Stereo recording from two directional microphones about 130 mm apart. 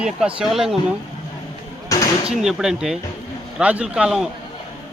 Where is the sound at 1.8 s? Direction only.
25° left (ahead or behind).